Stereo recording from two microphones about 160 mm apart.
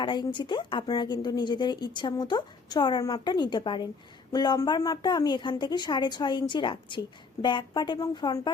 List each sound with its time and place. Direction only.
0.0 s speech: 30° left (ahead or behind)